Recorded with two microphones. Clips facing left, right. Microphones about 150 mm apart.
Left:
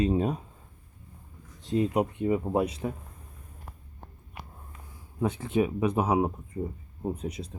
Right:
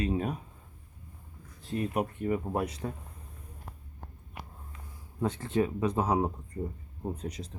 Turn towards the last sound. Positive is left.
turn(degrees=10)  # may be behind; listen again after turning